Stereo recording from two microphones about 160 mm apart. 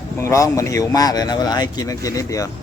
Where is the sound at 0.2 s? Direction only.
20° left (ahead or behind).